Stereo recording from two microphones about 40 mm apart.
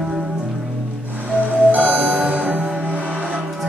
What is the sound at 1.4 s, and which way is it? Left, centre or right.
Music, right.